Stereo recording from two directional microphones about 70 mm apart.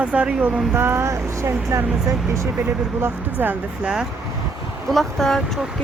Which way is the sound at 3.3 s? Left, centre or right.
Right.